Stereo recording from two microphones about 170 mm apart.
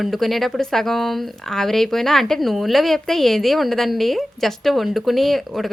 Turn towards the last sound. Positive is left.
turn(degrees=0)  # may be behind; listen again after turning